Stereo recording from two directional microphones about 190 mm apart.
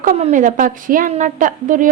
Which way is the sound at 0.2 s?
40° right (ahead or behind).